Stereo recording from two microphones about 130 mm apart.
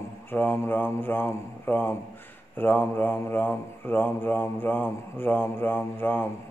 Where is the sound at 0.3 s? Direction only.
15° left (ahead or behind).